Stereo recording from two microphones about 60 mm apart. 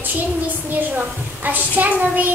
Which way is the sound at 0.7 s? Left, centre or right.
Right.